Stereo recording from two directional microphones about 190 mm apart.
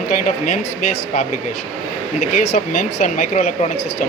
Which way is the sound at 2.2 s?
40° left (ahead or behind).